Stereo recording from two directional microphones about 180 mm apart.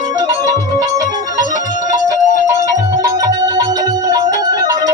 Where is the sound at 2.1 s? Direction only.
15° right (ahead or behind).